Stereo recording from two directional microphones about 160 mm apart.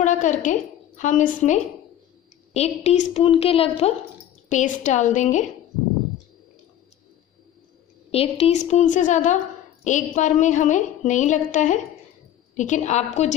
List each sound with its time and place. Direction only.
0.0 s a woman's voice: 50° left (ahead or behind)
2.5 s a woman's voice: 40° left (ahead or behind)
4.5 s a woman's voice: 50° left (ahead or behind)
8.1 s a woman's voice: 40° left (ahead or behind)